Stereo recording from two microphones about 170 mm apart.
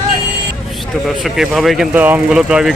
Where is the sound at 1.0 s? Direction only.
Centre (ahead or behind).